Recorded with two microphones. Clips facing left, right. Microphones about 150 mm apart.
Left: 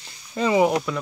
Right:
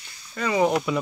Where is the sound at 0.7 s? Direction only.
Centre (ahead or behind).